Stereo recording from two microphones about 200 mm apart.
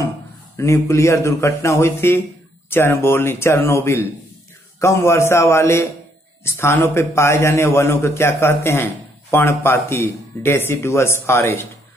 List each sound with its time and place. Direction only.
0.6 s a man's voice: 15° left (ahead or behind)